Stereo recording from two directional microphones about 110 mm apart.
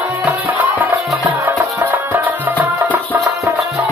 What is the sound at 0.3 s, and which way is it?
Music, 15° right (ahead or behind).